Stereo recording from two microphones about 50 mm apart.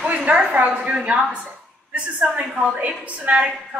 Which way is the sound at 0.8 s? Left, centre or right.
Right.